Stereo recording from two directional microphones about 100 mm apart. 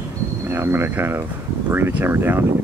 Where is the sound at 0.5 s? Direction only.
25° right (ahead or behind).